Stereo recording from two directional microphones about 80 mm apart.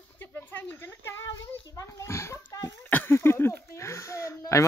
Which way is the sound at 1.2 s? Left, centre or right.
Left.